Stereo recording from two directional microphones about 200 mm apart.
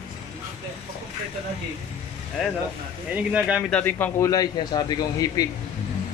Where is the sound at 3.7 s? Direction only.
10° left (ahead or behind).